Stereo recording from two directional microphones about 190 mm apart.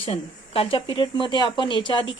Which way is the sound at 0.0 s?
30° left (ahead or behind).